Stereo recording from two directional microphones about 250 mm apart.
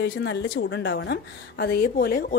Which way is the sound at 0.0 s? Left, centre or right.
Left.